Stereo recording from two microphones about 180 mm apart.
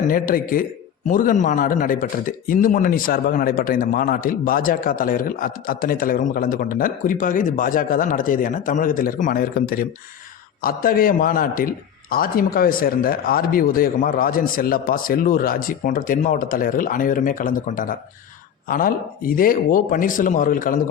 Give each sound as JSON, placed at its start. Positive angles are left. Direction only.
{"t": 0.1, "sound": "speech", "side_deg": 50}